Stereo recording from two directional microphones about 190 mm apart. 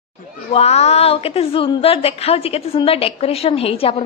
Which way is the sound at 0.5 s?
35° left (ahead or behind).